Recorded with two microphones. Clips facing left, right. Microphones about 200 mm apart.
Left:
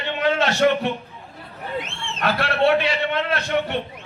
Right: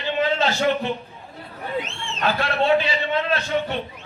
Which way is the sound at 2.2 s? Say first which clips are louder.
Left 2 dB; 70° left (ahead or behind).